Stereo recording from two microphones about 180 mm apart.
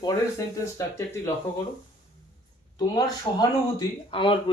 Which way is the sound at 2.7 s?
25° left (ahead or behind).